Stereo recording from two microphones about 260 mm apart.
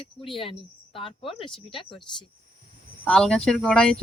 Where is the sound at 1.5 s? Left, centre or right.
Centre.